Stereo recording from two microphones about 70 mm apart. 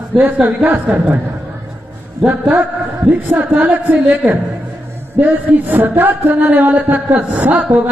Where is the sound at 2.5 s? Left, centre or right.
Right.